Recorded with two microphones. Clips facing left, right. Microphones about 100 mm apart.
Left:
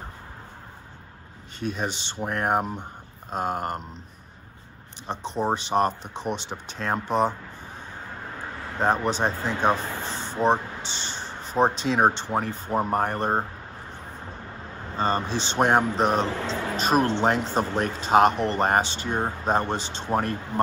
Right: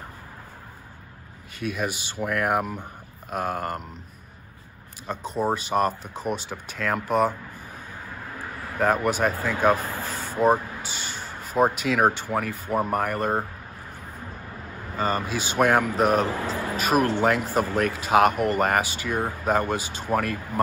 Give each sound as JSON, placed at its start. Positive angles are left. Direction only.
{"t": 1.6, "sound": "speech", "side_deg": 30}
{"t": 5.1, "sound": "speech", "side_deg": 30}
{"t": 8.7, "sound": "speech", "side_deg": 25}
{"t": 15.0, "sound": "speech", "side_deg": 30}